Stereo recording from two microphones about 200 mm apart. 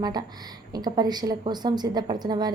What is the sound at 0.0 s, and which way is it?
A woman's voice, 20° right (ahead or behind).